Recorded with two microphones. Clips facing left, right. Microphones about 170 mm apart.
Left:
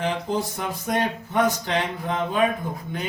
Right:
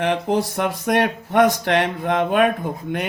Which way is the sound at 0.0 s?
70° right (ahead or behind).